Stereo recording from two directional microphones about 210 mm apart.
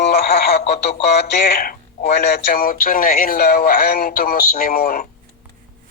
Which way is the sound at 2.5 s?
45° left (ahead or behind).